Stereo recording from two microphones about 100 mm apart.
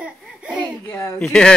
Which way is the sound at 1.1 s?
10° left (ahead or behind).